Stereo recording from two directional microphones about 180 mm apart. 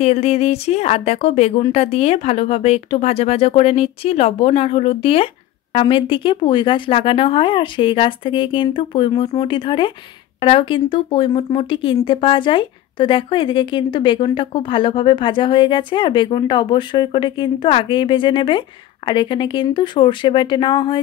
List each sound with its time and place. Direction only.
0.0 s speech: 35° left (ahead or behind)